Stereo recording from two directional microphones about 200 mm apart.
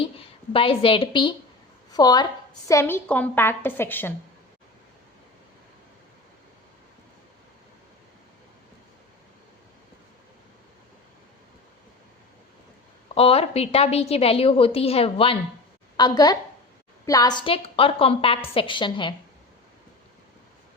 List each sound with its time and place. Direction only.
0.0 s a woman's voice: 25° left (ahead or behind); by 4.1 s 10° left (ahead or behind)
13.1 s a woman's voice: 30° left (ahead or behind)